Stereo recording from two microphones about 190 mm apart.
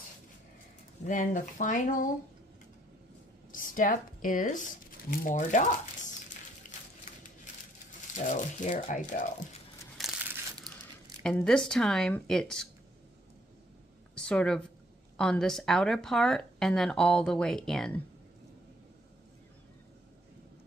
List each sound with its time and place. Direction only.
1.0 s speech: 40° left (ahead or behind)
3.5 s speech: 45° left (ahead or behind)
8.2 s speech: 40° left (ahead or behind)
9.9 s crumpling: centre (ahead or behind)
11.2 s speech: 5° left (ahead or behind)
14.1 s a sound: 5° left (ahead or behind)
15.1 s speech: 5° left (ahead or behind)